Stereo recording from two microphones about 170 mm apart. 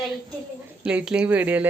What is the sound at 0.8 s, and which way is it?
Speech, 5° right (ahead or behind).